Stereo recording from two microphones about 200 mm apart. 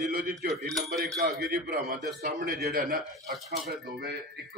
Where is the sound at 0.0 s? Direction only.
50° right (ahead or behind).